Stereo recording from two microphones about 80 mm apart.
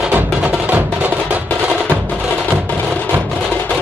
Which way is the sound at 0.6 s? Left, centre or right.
Centre.